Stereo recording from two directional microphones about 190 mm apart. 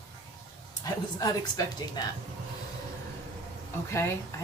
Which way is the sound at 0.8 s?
20° left (ahead or behind).